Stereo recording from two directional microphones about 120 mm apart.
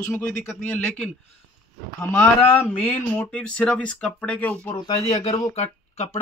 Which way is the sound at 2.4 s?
15° left (ahead or behind).